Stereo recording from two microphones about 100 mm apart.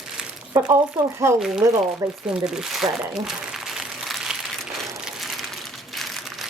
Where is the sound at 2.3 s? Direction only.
5° right (ahead or behind).